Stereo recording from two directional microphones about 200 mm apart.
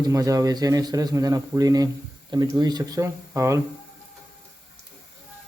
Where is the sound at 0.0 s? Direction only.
15° right (ahead or behind).